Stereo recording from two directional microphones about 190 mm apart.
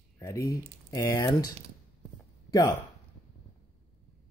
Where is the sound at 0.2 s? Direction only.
15° left (ahead or behind).